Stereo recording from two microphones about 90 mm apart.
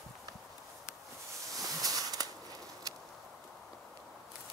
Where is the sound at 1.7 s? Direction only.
40° right (ahead or behind).